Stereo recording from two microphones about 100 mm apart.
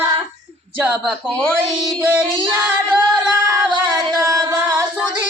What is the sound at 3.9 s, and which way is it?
Music, 35° right (ahead or behind).